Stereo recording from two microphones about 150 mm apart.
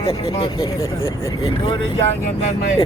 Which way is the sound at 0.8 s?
20° left (ahead or behind).